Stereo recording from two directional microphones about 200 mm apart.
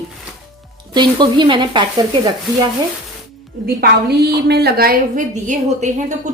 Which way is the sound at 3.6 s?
55° right (ahead or behind).